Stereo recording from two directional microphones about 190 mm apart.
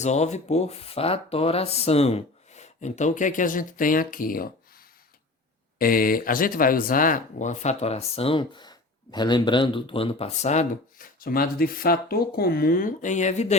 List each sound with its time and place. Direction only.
0.0 s speech: 35° left (ahead or behind)